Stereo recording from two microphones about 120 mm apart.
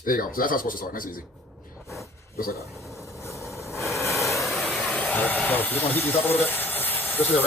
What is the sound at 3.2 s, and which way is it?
Vehicle, 25° left (ahead or behind).